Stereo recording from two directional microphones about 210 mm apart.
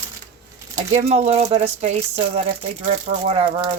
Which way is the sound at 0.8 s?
30° right (ahead or behind).